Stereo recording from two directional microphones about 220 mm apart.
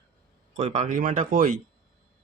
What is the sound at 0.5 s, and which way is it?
Speech, 30° right (ahead or behind).